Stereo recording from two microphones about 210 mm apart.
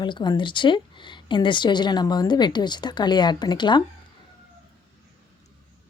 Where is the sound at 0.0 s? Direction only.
20° left (ahead or behind).